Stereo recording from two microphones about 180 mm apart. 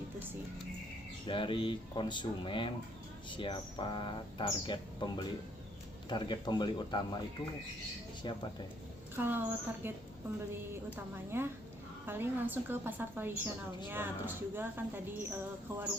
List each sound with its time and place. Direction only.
1.3 s speech: 30° left (ahead or behind)
9.1 s a woman's voice: 10° right (ahead or behind)
11.3 s a woman's voice: 10° right (ahead or behind)